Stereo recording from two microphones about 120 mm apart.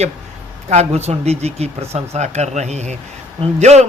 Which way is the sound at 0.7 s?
65° right (ahead or behind).